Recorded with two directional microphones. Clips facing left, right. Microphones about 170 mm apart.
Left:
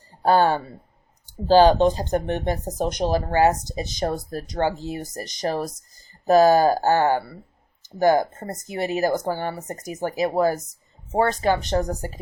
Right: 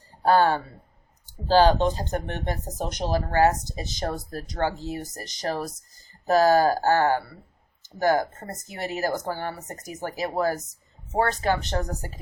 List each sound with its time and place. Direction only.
0.2 s speech: 15° left (ahead or behind)